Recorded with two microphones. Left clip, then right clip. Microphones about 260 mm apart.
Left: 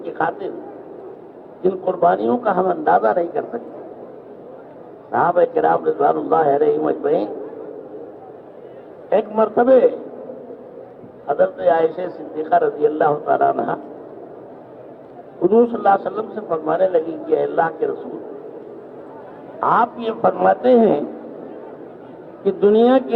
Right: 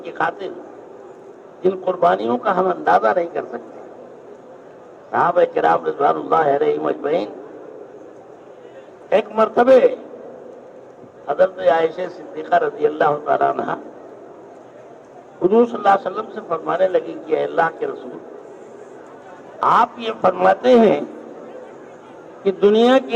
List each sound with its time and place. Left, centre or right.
0.0 s a man's voice: centre
1.6 s a man's voice: centre
5.1 s a man's voice: centre
9.0 s a man's voice: centre
11.3 s a man's voice: centre
15.4 s a man's voice: centre
19.5 s a man's voice: centre
22.4 s a man's voice: centre